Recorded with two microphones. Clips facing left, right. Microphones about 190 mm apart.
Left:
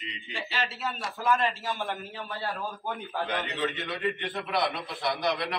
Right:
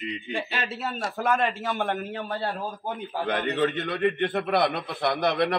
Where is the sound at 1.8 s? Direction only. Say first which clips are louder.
Right 6 dB; 60° right (ahead or behind).